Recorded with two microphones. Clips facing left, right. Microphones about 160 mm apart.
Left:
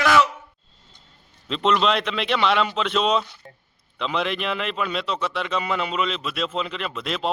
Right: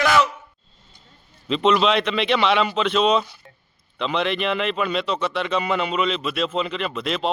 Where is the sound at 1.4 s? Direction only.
Centre (ahead or behind).